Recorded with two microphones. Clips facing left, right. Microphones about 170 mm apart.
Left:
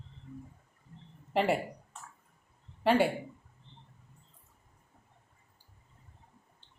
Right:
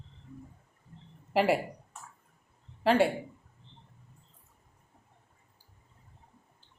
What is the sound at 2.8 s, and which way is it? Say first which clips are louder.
Speech: right 1 dB; centre (ahead or behind).